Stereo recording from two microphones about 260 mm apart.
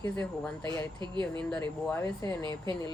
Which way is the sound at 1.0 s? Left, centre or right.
Centre.